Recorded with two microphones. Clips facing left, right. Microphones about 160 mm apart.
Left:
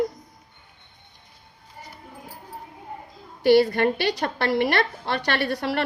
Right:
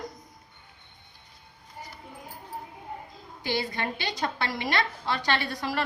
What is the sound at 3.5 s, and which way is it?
A woman's voice, 60° left (ahead or behind).